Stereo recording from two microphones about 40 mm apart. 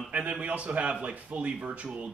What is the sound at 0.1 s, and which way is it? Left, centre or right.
Speech, right.